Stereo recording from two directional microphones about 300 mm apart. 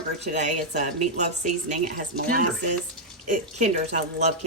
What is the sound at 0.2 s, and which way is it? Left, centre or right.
Speech, right.